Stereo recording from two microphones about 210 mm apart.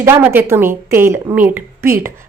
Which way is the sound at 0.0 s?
10° right (ahead or behind).